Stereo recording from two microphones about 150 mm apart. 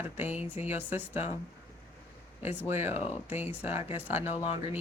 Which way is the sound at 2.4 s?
15° right (ahead or behind).